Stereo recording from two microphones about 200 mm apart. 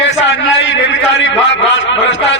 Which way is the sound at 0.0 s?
70° left (ahead or behind).